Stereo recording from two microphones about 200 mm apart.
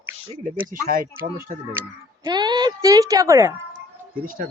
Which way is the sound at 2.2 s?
20° right (ahead or behind).